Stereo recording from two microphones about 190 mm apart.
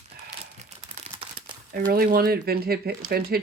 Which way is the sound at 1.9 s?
50° right (ahead or behind).